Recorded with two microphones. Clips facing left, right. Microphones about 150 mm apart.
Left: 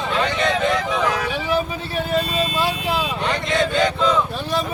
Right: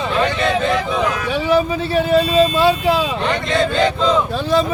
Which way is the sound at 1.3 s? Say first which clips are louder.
Right 6 dB; 85° right.